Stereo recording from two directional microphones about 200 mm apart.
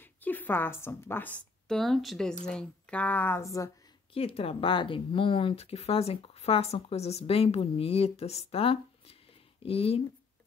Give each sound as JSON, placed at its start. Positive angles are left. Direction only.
{"t": 0.0, "sound": "a woman's voice", "side_deg": 10}
{"t": 4.1, "sound": "speech", "side_deg": 30}